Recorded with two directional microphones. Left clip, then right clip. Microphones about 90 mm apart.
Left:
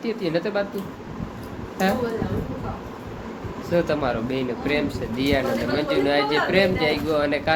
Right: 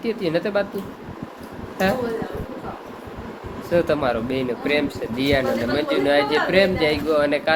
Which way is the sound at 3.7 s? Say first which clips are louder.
Right 3 dB; 30° right (ahead or behind).